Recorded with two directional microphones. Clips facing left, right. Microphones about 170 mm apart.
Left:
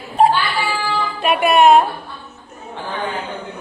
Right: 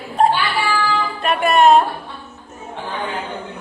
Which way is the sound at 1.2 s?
5° left (ahead or behind).